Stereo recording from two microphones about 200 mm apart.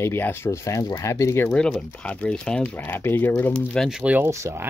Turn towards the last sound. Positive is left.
turn(degrees=-15)  # may be behind; listen again after turning